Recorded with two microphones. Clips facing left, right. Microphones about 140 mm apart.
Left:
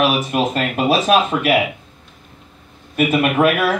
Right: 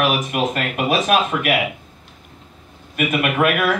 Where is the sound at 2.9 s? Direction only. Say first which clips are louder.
Left 4 dB; 30° left (ahead or behind).